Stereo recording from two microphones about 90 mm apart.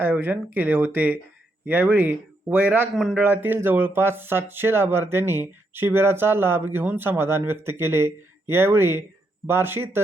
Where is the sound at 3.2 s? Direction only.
20° right (ahead or behind).